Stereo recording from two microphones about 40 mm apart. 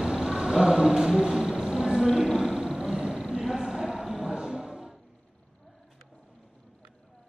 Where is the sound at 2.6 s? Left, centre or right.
Centre.